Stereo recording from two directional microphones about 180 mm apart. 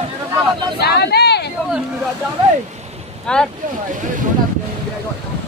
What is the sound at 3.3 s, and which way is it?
Speech, 5° left (ahead or behind).